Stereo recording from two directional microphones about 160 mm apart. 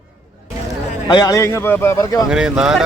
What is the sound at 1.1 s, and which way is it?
Speech, 25° left (ahead or behind).